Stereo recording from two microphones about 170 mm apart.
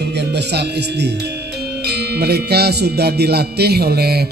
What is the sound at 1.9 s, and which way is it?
Music, 75° right (ahead or behind).